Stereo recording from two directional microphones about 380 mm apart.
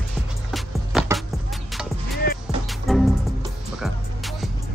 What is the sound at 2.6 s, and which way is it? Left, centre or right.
Music, centre.